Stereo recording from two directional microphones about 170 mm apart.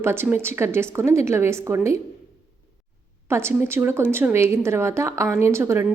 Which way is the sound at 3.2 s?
15° right (ahead or behind).